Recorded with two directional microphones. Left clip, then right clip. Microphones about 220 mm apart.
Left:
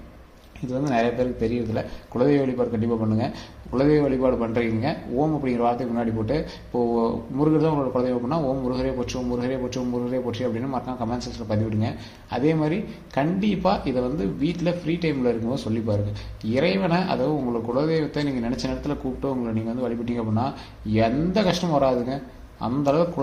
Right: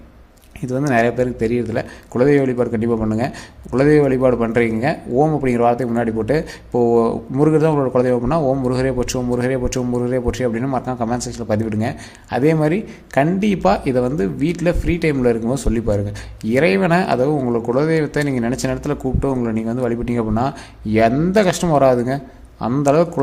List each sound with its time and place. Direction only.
0.7 s a man's voice: 35° right (ahead or behind)